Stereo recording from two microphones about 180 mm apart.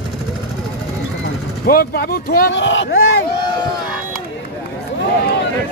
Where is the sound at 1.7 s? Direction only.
55° left (ahead or behind).